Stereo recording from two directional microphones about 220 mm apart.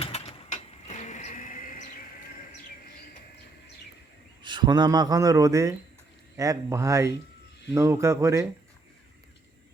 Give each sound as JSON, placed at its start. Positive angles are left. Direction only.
{"t": 0.0, "sound": "mechanisms", "side_deg": 30}
{"t": 4.4, "sound": "speech", "side_deg": -20}